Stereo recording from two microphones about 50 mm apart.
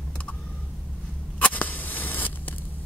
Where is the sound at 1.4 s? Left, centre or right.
Left.